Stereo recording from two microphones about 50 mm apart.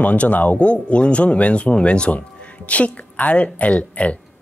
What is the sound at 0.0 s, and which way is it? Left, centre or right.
Speech, left.